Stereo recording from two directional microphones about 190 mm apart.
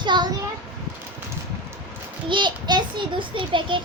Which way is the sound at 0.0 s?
25° right (ahead or behind).